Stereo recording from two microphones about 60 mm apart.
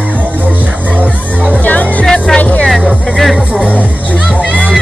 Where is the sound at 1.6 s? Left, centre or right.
Left.